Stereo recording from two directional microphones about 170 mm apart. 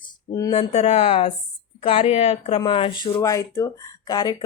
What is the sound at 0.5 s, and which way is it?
Speech, 40° left (ahead or behind).